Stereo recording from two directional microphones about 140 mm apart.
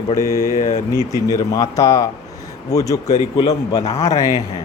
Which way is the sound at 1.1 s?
25° left (ahead or behind).